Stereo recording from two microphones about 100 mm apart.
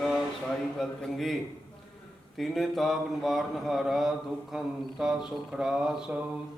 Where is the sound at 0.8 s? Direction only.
Centre (ahead or behind).